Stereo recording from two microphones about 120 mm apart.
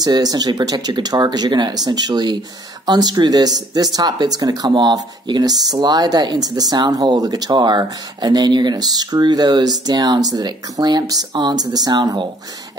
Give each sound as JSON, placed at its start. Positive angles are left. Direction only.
{"t": 0.0, "sound": "speech", "side_deg": -30}